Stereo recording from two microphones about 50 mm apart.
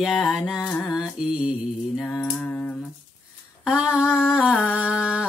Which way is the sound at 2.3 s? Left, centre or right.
Left.